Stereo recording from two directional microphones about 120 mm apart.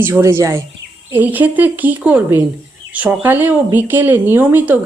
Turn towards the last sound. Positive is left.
turn(degrees=-10)  # may be behind; listen again after turning